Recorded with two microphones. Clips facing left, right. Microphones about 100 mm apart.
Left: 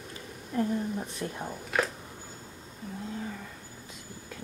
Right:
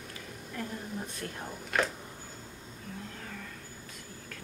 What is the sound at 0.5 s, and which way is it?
Speech, 25° left (ahead or behind).